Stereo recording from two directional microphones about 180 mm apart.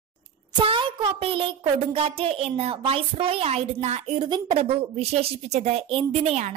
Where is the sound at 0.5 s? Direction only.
30° right (ahead or behind).